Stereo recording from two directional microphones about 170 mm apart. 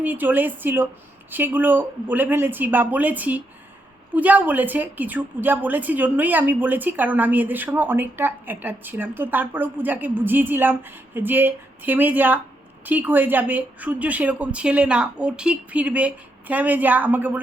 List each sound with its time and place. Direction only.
0.0 s a woman's voice: 10° right (ahead or behind)